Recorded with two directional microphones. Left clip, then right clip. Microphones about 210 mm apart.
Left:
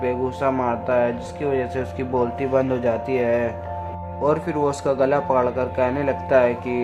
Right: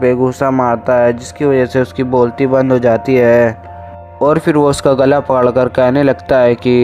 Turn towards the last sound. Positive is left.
turn(degrees=-40)  # may be behind; listen again after turning